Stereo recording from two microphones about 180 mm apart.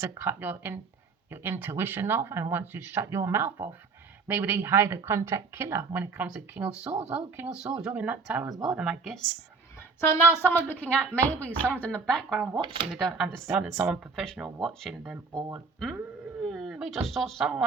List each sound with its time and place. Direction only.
0.0 s a woman's voice: 15° right (ahead or behind)
10.1 s speech: 10° left (ahead or behind)
12.4 s speech: 25° right (ahead or behind)
12.9 s speech: centre (ahead or behind)
16.4 s speech: centre (ahead or behind)